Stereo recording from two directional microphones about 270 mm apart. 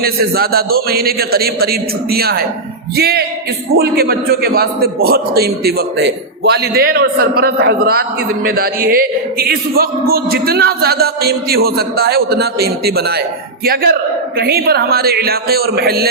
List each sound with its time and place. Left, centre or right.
0.0 s a man's voice: right
14.3 s a man's voice: right